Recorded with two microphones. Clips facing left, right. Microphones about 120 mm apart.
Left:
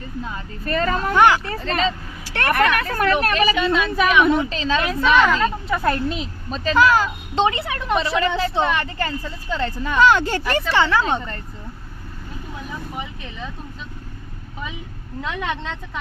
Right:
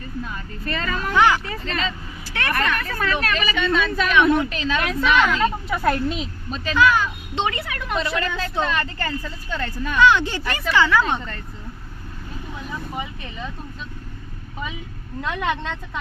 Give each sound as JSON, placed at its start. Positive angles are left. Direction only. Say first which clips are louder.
{"t": 0.6, "sound": "speech", "louder": "left 5 dB", "side_deg": 40}
{"t": 1.1, "sound": "speech", "louder": "left 2 dB", "side_deg": 55}
{"t": 1.6, "sound": "speech", "louder": "left 5 dB", "side_deg": 40}
{"t": 2.3, "sound": "a woman's voice", "louder": "left 5 dB", "side_deg": 60}
{"t": 3.2, "sound": "speech", "louder": "left 4 dB", "side_deg": 40}
{"t": 3.9, "sound": "a woman's voice", "louder": "left 1 dB", "side_deg": 15}
{"t": 5.4, "sound": "a woman's voice", "louder": "even", "side_deg": 0}
{"t": 6.5, "sound": "a woman's voice", "louder": "left 2 dB", "side_deg": 35}
{"t": 10.1, "sound": "speech", "louder": "left 2 dB", "side_deg": 45}
{"t": 10.5, "sound": "a woman's voice", "louder": "even", "side_deg": 30}
{"t": 15.2, "sound": "a woman's voice", "louder": "right 2 dB", "side_deg": 0}